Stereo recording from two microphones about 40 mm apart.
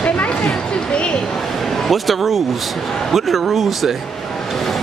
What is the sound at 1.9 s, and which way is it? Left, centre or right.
A man's voice, centre.